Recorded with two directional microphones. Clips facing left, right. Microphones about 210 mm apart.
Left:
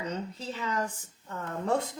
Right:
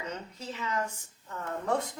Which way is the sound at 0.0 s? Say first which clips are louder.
Left 4 dB; 30° left (ahead or behind).